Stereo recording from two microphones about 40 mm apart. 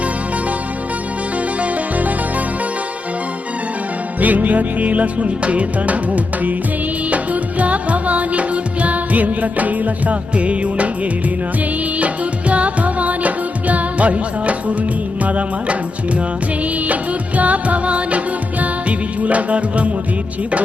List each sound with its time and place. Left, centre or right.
1.6 s music: right
4.2 s music: right
7.6 s music: right
11.9 s music: right
16.9 s music: right